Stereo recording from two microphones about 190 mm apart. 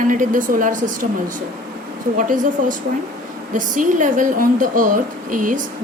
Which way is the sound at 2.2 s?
45° right (ahead or behind).